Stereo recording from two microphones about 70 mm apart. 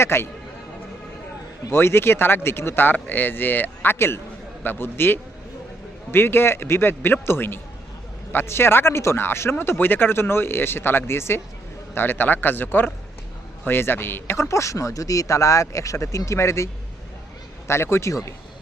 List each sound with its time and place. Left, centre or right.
0.0 s speech: left
1.7 s speech: left
17.7 s speech: left